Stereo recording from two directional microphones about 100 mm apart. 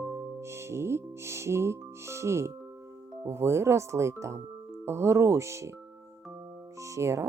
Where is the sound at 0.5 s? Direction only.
25° right (ahead or behind).